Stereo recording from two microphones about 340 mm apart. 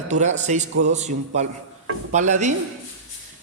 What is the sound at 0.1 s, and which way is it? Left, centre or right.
A man's voice, right.